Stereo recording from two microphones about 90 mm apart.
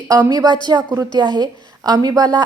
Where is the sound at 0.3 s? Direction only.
55° right (ahead or behind).